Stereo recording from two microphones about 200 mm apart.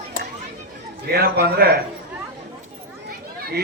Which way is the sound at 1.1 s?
50° right (ahead or behind).